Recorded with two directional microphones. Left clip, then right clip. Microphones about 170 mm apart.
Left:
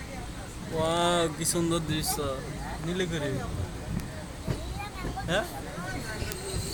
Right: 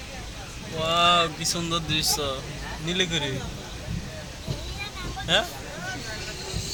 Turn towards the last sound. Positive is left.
turn(degrees=5)  # may be behind; listen again after turning